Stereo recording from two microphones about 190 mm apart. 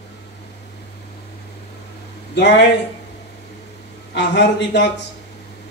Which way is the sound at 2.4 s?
65° left (ahead or behind).